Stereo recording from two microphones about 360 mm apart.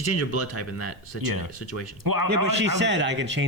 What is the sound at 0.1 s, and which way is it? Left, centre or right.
Speech, left.